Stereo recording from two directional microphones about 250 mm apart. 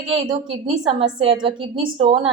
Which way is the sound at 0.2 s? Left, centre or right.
Centre.